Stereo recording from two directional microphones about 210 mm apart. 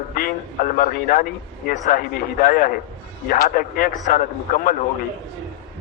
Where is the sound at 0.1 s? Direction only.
45° left (ahead or behind).